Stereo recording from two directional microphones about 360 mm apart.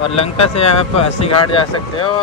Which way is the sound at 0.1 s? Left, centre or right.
Centre.